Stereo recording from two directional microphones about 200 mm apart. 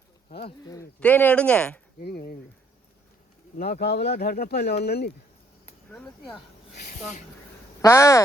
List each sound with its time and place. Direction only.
0.3 s speech: 30° left (ahead or behind)
0.7 s speech: 10° left (ahead or behind)
2.0 s speech: 45° left (ahead or behind)
3.6 s speech: 50° left (ahead or behind)
5.9 s speech: 5° left (ahead or behind)
6.7 s speech: 45° left (ahead or behind)
7.8 s speech: 15° left (ahead or behind)